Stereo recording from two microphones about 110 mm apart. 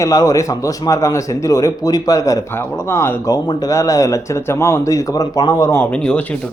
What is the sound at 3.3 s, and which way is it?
A man's voice, 35° left (ahead or behind).